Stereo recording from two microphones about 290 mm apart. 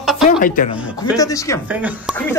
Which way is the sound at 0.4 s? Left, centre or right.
Left.